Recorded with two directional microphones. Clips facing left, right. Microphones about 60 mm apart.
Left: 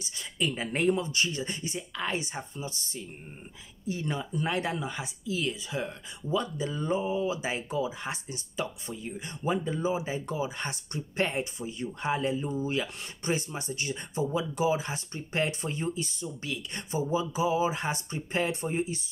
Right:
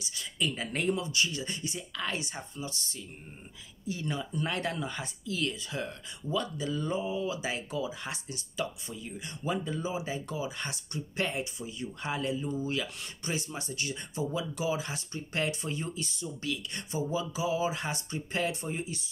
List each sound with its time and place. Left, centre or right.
0.0 s speech: left
4.3 s speech: centre